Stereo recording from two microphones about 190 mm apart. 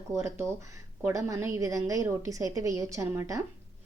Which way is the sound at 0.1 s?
15° right (ahead or behind).